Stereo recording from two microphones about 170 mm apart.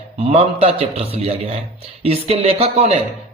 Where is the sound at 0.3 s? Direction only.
35° right (ahead or behind).